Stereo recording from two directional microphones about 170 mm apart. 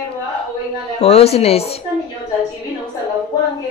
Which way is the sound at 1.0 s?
35° left (ahead or behind).